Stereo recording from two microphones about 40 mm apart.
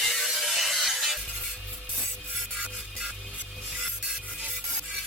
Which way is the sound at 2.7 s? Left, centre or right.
Right.